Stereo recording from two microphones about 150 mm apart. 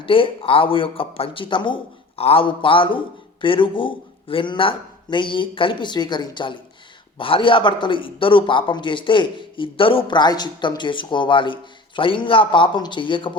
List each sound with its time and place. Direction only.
0.0 s a man's voice: 35° left (ahead or behind)